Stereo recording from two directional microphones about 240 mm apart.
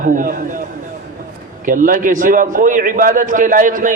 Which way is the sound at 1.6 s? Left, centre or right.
Right.